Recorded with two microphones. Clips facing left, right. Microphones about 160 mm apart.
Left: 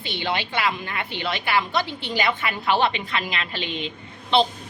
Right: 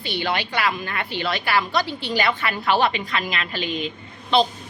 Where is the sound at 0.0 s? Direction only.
20° left (ahead or behind).